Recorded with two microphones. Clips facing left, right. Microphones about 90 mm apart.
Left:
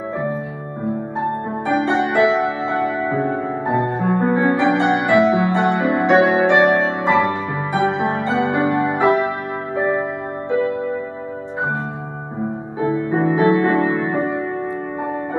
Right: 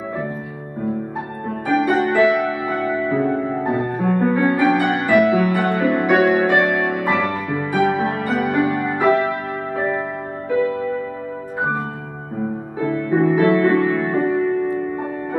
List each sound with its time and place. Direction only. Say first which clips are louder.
1.7 s music: right 1 dB; 25° left (ahead or behind)
12.8 s music: right 1 dB; 25° left (ahead or behind)